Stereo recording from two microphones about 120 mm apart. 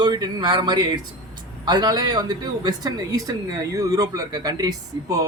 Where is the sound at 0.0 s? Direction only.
35° right (ahead or behind).